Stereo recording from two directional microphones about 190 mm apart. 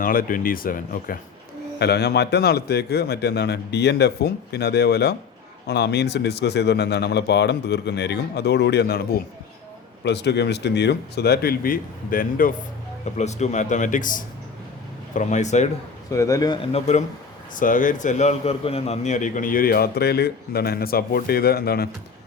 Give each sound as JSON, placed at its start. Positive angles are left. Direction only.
{"t": 0.0, "sound": "a man's voice", "side_deg": 50}
{"t": 1.8, "sound": "speech", "side_deg": 60}
{"t": 13.1, "sound": "speech", "side_deg": 35}
{"t": 16.1, "sound": "speech", "side_deg": 15}
{"t": 16.7, "sound": "a man's voice", "side_deg": 35}